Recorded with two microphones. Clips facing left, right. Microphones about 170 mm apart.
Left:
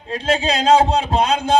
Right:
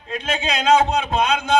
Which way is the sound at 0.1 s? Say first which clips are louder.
Left 5 dB; 30° left (ahead or behind).